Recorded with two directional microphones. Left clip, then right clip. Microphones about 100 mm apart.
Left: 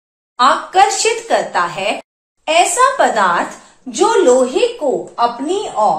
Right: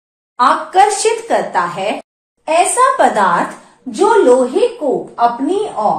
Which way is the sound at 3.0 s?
35° right (ahead or behind).